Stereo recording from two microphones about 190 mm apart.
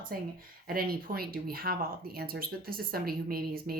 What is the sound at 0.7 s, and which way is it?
A woman's voice, 50° right (ahead or behind).